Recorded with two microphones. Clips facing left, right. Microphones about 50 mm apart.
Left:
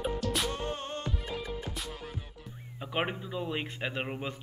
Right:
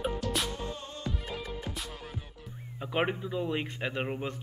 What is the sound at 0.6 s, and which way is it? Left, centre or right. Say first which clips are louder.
Music: left 3 dB; left.